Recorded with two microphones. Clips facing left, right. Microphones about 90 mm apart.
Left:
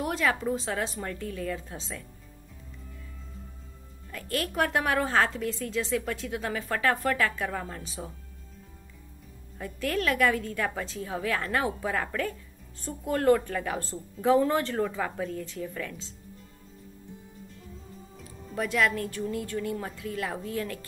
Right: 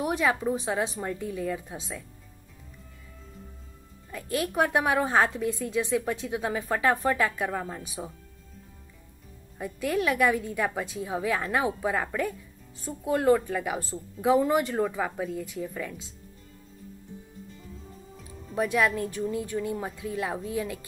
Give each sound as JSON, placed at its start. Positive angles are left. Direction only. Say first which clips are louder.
{"t": 0.0, "sound": "a woman's voice", "louder": "right 2 dB", "side_deg": -15}
{"t": 4.1, "sound": "a woman's voice", "louder": "right 2 dB", "side_deg": -15}
{"t": 9.6, "sound": "a woman's voice", "louder": "right 2 dB", "side_deg": -15}
{"t": 18.5, "sound": "a woman's voice", "louder": "right 2 dB", "side_deg": -20}